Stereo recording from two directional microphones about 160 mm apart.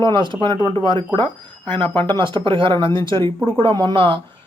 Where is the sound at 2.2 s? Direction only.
30° right (ahead or behind).